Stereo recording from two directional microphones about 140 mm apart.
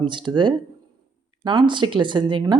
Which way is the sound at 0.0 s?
35° right (ahead or behind).